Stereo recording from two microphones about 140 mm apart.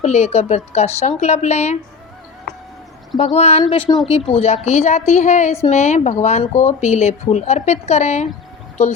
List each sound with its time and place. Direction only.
0.0 s a woman's voice: 50° left (ahead or behind)
3.2 s a woman's voice: 50° left (ahead or behind)
3.6 s speech: 35° left (ahead or behind)
4.3 s a woman's voice: 50° left (ahead or behind)